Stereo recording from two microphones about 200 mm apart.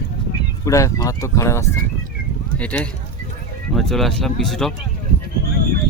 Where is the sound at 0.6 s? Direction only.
15° left (ahead or behind).